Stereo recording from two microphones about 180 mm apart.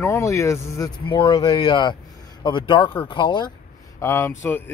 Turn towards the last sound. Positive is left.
turn(degrees=10)  # may be behind; listen again after turning